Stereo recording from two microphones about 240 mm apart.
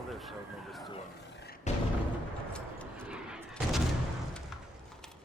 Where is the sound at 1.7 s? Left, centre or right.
Left.